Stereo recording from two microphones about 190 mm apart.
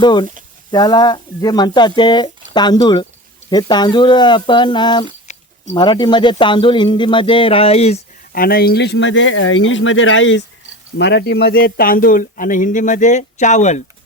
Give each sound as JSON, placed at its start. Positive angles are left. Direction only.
{"t": 0.0, "sound": "speech", "side_deg": 25}
{"t": 5.3, "sound": "a sound", "side_deg": 40}
{"t": 5.7, "sound": "speech", "side_deg": 25}
{"t": 8.3, "sound": "speech", "side_deg": 50}
{"t": 10.9, "sound": "speech", "side_deg": 60}